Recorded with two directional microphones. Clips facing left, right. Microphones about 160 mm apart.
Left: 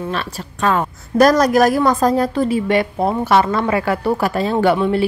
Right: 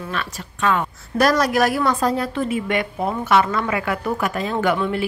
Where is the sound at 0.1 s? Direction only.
35° left (ahead or behind).